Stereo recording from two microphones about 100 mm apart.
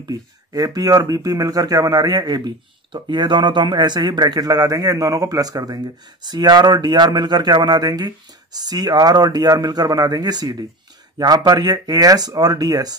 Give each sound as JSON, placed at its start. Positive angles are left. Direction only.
{"t": 0.0, "sound": "speech", "side_deg": -40}